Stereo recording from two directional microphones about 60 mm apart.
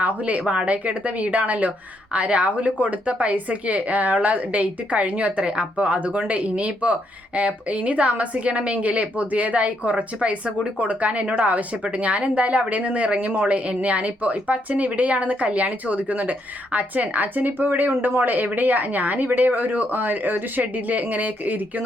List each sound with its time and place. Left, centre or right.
0.0 s a woman's voice: right